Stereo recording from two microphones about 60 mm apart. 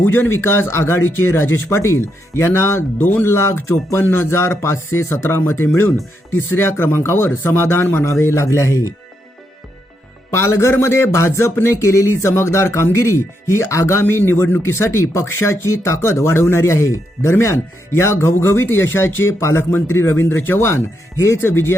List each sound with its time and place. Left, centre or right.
0.0 s speech: left
8.0 s speech: left
10.3 s speech: left
14.0 s speech: left